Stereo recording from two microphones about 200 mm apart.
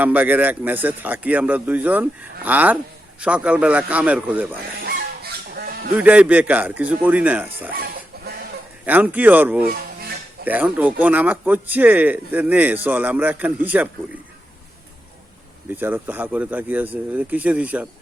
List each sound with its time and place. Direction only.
0.0 s a man's voice: 10° right (ahead or behind)
4.8 s goose: 50° right (ahead or behind)
6.0 s a man's voice: 5° right (ahead or behind)
8.8 s a man's voice: 10° right (ahead or behind)
9.6 s music: 50° right (ahead or behind)
10.4 s a man's voice: 10° right (ahead or behind)
15.7 s a man's voice: 10° right (ahead or behind)